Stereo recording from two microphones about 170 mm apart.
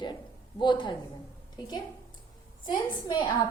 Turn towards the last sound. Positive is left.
turn(degrees=30)  # may be behind; listen again after turning